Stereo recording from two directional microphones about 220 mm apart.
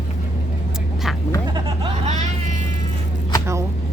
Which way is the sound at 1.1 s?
Centre (ahead or behind).